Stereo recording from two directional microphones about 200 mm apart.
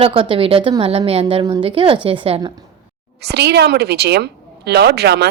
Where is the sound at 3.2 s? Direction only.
55° right (ahead or behind).